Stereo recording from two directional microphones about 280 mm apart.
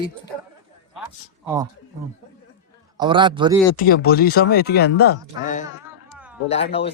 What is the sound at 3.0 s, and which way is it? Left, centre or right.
Speech, centre.